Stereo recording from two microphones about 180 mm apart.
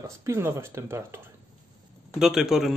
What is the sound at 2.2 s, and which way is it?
Speech, 5° right (ahead or behind).